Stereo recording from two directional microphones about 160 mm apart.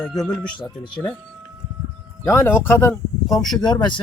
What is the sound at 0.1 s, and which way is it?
Speech, 25° left (ahead or behind).